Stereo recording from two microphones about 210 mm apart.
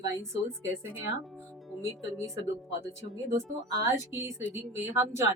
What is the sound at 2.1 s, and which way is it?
Speech, 15° right (ahead or behind).